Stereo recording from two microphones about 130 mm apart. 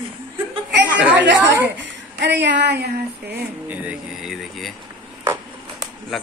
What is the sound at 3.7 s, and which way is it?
Speech, 10° right (ahead or behind).